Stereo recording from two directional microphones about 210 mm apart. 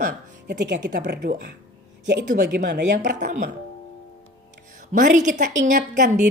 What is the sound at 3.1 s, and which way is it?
Speech, 35° right (ahead or behind).